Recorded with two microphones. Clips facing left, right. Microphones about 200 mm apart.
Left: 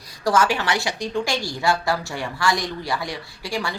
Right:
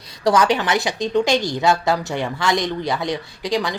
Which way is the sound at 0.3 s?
20° right (ahead or behind).